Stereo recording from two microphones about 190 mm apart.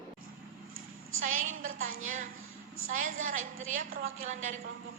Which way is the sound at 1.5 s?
90° right.